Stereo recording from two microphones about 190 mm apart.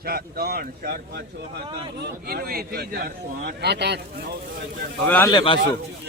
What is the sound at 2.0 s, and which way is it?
A man's voice, 55° right (ahead or behind).